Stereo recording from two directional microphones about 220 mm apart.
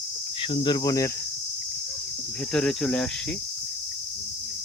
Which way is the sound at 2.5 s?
5° left (ahead or behind).